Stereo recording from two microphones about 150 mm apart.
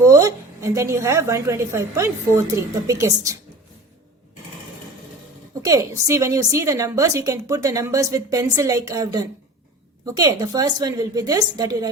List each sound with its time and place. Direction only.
0.0 s a woman's voice: 20° right (ahead or behind)
5.6 s a woman's voice: 20° right (ahead or behind)